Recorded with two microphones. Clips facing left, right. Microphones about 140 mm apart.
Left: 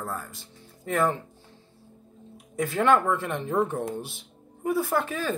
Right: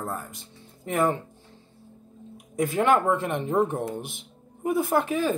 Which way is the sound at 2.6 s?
15° right (ahead or behind).